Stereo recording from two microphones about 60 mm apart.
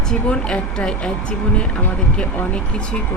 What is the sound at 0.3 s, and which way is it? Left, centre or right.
A woman's voice, centre.